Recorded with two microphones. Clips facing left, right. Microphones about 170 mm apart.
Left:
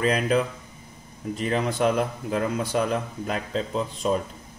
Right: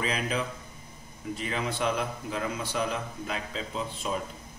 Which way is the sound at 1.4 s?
45° left (ahead or behind).